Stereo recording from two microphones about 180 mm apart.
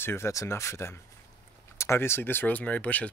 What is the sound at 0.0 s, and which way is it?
Speech, 15° left (ahead or behind).